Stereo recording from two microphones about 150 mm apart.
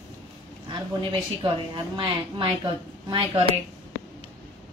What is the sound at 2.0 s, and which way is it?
Speech, 30° right (ahead or behind).